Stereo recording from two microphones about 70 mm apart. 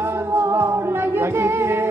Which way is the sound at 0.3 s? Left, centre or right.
Right.